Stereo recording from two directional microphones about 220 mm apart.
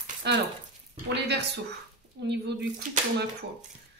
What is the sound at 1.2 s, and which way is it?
Speech, 50° right (ahead or behind).